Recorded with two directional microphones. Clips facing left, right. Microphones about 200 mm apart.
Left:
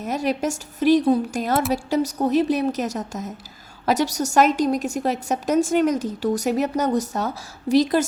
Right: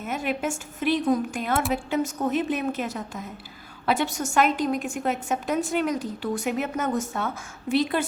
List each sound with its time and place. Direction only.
0.0 s a woman's voice: 40° left (ahead or behind)